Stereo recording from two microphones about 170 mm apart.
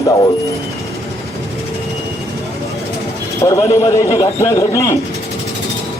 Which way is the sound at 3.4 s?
20° left (ahead or behind).